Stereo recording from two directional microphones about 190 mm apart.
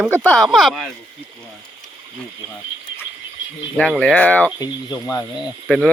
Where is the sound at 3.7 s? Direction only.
5° left (ahead or behind).